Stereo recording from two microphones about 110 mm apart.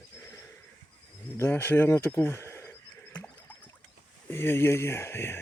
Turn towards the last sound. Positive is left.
turn(degrees=20)  # may be behind; listen again after turning